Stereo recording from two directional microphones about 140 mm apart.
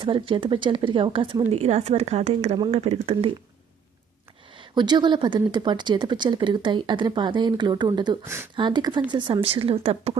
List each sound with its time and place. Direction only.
0.0 s speech: 35° right (ahead or behind)
4.5 s speech: 35° right (ahead or behind)